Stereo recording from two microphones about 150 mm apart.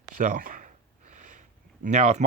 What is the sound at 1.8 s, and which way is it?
Speech, 50° right (ahead or behind).